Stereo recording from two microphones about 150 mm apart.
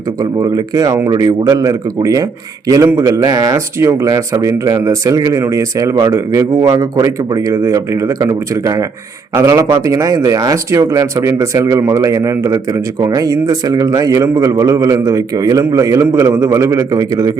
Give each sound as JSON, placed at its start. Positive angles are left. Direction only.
{"t": 0.2, "sound": "a man's voice", "side_deg": -20}